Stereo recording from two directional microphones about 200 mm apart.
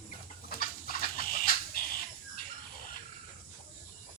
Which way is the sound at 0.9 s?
45° left (ahead or behind).